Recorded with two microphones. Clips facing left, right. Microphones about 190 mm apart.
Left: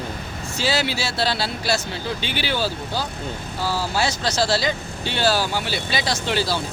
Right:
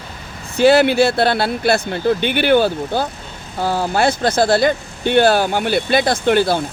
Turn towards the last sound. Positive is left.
turn(degrees=-55)  # may be behind; listen again after turning